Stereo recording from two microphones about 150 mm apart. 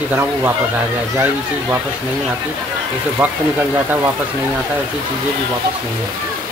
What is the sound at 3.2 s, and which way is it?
Speech, 10° right (ahead or behind).